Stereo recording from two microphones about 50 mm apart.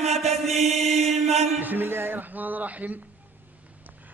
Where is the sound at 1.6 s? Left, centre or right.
Right.